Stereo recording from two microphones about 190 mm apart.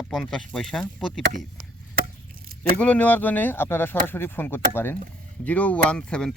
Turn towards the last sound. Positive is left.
turn(degrees=5)  # may be behind; listen again after turning